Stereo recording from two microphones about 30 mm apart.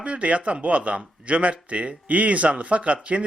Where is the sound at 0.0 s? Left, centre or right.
Right.